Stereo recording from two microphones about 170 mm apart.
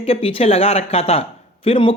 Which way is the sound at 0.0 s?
35° left (ahead or behind).